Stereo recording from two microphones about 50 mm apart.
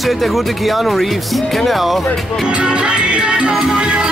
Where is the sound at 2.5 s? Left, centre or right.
Centre.